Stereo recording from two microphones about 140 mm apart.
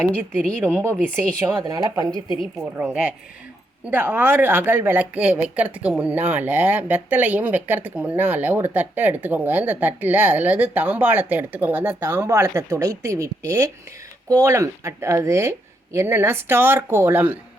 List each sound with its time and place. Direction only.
0.7 s speech: 15° right (ahead or behind)
0.9 s a woman's voice: 5° left (ahead or behind)
1.4 s speech: 20° right (ahead or behind)
2.8 s speech: 10° right (ahead or behind)